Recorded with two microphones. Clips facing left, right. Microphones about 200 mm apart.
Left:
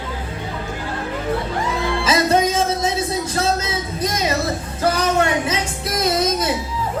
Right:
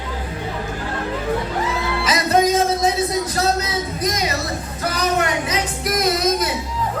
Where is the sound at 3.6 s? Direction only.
25° left (ahead or behind).